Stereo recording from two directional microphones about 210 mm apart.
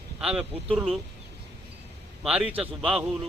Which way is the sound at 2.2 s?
5° right (ahead or behind).